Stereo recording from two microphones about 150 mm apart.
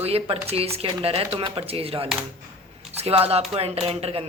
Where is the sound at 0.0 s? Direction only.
40° right (ahead or behind).